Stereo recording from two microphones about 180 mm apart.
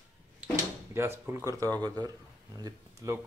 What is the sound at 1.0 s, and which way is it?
Speech, 15° right (ahead or behind).